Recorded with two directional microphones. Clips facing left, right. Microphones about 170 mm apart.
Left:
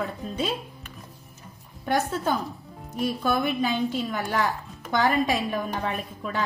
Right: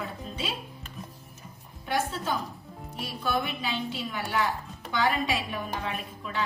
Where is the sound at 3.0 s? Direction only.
45° left (ahead or behind).